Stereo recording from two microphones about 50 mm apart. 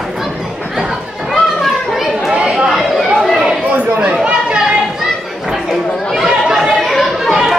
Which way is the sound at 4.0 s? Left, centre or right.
Centre.